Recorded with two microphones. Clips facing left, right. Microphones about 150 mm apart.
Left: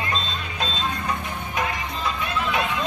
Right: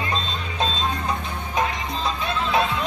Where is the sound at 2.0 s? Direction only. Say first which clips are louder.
Even; 30° right (ahead or behind).